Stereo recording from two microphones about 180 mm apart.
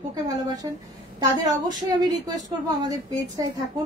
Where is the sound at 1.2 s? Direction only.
20° right (ahead or behind).